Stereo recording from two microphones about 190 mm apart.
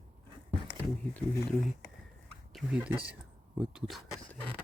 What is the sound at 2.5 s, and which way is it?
Speech, 5° right (ahead or behind).